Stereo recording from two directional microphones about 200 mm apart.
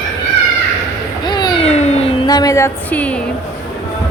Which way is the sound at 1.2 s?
20° left (ahead or behind).